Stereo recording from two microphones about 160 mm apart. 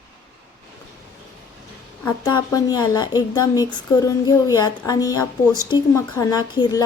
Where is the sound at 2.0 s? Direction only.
20° left (ahead or behind).